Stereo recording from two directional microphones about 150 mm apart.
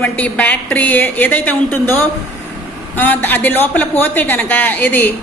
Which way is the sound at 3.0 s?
10° left (ahead or behind).